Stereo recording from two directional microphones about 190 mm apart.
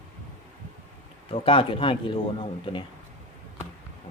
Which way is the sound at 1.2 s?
30° left (ahead or behind).